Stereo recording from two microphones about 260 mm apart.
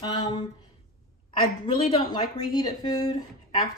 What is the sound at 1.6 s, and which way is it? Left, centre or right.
Speech, left.